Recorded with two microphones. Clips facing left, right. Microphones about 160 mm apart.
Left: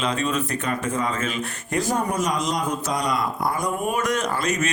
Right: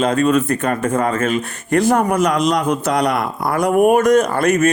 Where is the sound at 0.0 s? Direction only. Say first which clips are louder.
Right 9 dB; 50° right (ahead or behind); by 4.0 s 70° right (ahead or behind).